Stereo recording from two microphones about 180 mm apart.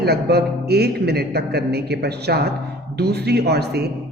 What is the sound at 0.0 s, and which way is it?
A man's voice, 65° right (ahead or behind).